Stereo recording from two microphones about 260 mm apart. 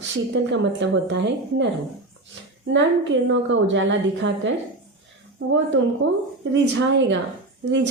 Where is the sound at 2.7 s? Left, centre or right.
Right.